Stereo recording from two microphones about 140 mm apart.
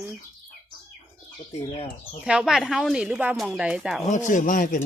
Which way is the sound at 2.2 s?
5° right (ahead or behind).